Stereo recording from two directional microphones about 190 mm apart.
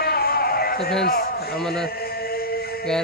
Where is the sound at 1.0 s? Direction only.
55° left (ahead or behind).